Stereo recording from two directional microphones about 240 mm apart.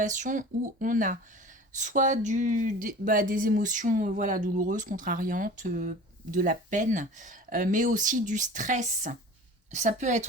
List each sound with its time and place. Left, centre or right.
0.0 s a woman's voice: right